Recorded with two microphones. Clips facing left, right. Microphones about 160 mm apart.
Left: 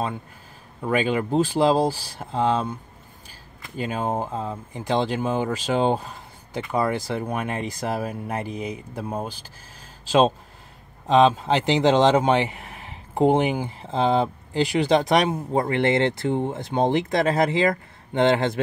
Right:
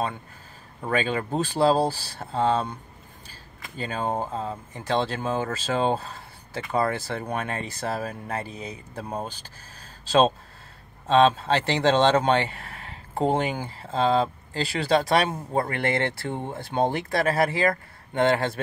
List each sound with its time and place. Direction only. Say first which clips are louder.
0.8 s speech: left 3 dB; 10° left (ahead or behind)